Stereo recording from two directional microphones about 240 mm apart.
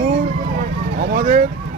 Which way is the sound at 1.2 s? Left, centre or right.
Right.